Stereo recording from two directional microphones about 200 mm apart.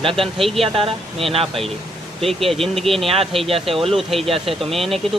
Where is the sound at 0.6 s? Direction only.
25° right (ahead or behind).